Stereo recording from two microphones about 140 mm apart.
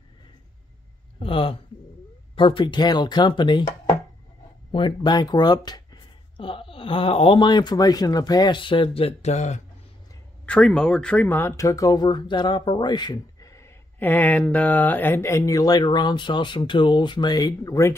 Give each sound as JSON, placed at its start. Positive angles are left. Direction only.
{"t": 1.2, "sound": "speech", "side_deg": 40}
{"t": 4.7, "sound": "speech", "side_deg": 35}
{"t": 10.4, "sound": "speech", "side_deg": 5}